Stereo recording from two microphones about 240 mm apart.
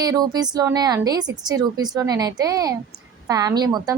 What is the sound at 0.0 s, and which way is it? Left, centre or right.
A woman's voice, centre.